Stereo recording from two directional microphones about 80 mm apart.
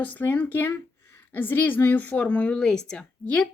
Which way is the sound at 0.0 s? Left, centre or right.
Left.